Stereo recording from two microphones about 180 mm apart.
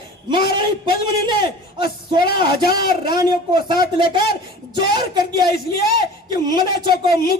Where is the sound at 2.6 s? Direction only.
60° left (ahead or behind).